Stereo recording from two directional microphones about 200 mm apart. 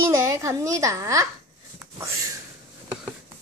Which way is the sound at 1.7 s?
15° right (ahead or behind).